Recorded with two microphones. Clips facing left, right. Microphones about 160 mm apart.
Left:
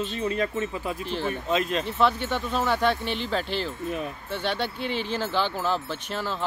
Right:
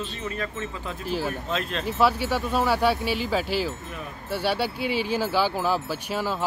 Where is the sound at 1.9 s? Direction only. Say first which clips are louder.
Right 3 dB; 5° right (ahead or behind).